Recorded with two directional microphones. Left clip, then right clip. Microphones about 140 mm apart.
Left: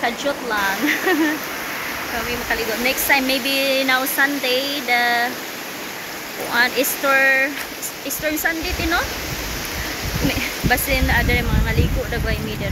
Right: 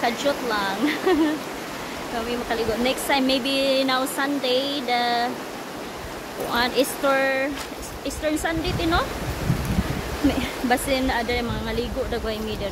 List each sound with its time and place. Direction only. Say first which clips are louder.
0.0 s speech: left 1 dB; 10° right (ahead or behind)
2.8 s speech: left 6 dB; 15° right (ahead or behind)
6.5 s speech: left 4 dB; 15° right (ahead or behind)
10.7 s speech: left 3 dB; 15° right (ahead or behind)